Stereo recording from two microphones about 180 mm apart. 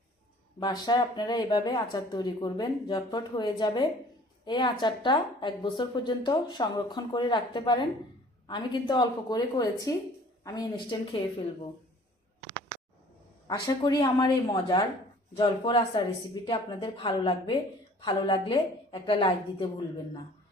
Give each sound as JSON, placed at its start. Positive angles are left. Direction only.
{"t": 0.6, "sound": "a woman's voice", "side_deg": 25}
{"t": 13.5, "sound": "a woman's voice", "side_deg": 20}